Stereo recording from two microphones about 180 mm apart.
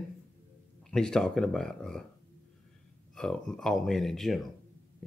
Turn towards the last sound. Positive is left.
turn(degrees=0)  # may be behind; listen again after turning